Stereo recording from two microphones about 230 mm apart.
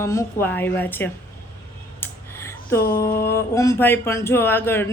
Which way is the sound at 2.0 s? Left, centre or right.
Centre.